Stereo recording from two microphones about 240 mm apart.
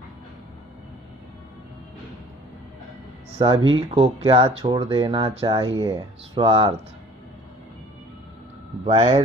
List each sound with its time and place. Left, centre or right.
3.3 s speech: right
8.8 s speech: right